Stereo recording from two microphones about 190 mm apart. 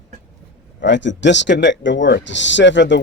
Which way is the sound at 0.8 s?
70° left (ahead or behind).